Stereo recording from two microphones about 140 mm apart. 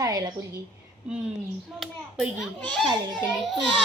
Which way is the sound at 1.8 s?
Centre (ahead or behind).